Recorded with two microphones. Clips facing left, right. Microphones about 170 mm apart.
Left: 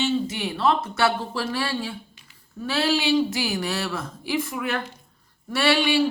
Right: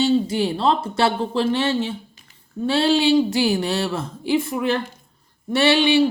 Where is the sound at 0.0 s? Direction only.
35° right (ahead or behind).